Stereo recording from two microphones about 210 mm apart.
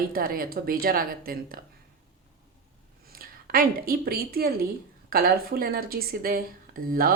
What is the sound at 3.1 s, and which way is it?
Speech, 45° right (ahead or behind).